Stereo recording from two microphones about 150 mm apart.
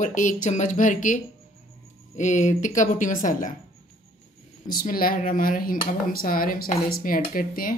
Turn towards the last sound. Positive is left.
turn(degrees=70)  # may be behind; listen again after turning